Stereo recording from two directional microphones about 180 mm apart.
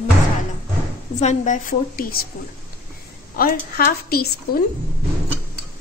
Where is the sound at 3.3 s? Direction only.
55° left (ahead or behind).